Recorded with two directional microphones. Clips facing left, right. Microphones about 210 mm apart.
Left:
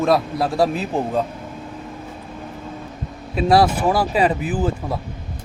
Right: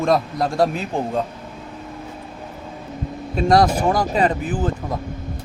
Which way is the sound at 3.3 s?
5° left (ahead or behind).